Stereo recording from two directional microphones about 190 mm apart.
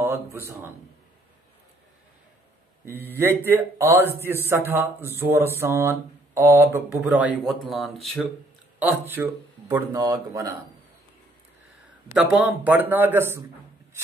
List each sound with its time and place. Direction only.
0.0 s speech: 10° right (ahead or behind)
2.8 s a man's voice: 10° right (ahead or behind)
8.7 s a man's voice: 10° right (ahead or behind)
12.1 s a man's voice: 10° right (ahead or behind)